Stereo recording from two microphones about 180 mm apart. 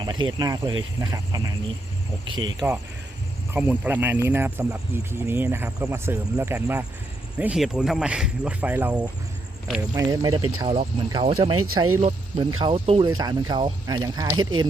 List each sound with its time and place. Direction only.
0.0 s speech: 25° right (ahead or behind)
2.3 s speech: 90° right
3.5 s speech: 10° right (ahead or behind)
10.1 s speech: 25° right (ahead or behind)